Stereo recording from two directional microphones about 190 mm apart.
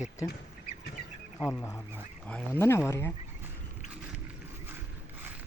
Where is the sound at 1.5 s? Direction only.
10° left (ahead or behind).